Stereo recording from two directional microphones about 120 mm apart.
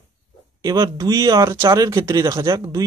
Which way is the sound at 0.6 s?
30° right (ahead or behind).